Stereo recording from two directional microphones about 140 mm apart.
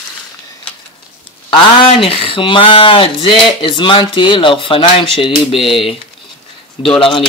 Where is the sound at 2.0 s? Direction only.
40° left (ahead or behind).